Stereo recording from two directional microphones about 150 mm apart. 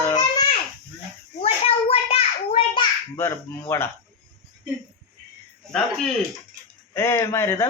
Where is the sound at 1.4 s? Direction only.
40° left (ahead or behind).